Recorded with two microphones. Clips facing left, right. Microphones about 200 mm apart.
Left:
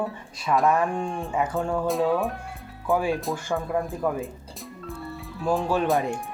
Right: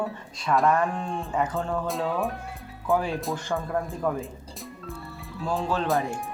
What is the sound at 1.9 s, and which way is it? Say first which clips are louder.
Speech: left 4 dB; centre (ahead or behind).